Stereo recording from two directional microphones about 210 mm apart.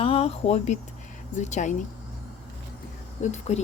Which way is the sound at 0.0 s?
30° left (ahead or behind).